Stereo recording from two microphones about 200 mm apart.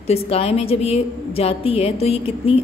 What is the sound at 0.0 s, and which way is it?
A woman's voice, 30° left (ahead or behind).